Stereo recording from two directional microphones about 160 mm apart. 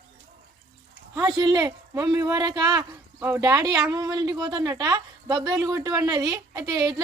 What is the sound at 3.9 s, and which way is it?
Speech, 25° right (ahead or behind).